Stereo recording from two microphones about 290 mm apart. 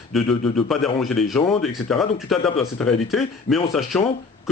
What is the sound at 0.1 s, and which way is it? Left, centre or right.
Speech, centre.